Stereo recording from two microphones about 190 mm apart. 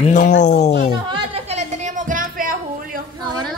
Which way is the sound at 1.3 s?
35° right (ahead or behind).